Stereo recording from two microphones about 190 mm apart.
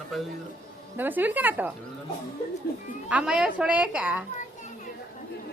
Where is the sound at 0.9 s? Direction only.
10° right (ahead or behind).